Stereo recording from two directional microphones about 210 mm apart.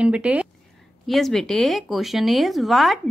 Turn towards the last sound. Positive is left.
turn(degrees=0)  # may be behind; listen again after turning